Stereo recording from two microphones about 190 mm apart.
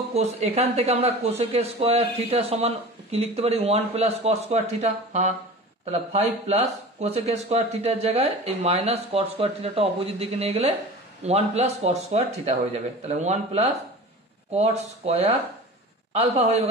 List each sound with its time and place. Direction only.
0.1 s speech: 35° right (ahead or behind)